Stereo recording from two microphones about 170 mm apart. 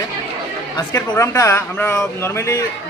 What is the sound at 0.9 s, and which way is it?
Speech, 15° left (ahead or behind).